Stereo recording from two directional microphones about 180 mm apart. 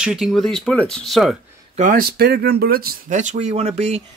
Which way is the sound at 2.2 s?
60° right (ahead or behind).